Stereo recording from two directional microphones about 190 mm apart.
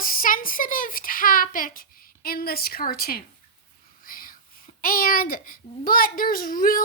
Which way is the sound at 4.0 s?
50° left (ahead or behind).